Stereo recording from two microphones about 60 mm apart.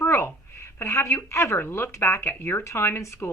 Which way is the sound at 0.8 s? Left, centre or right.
Left.